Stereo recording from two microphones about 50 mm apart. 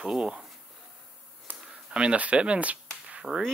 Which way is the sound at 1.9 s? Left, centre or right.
Right.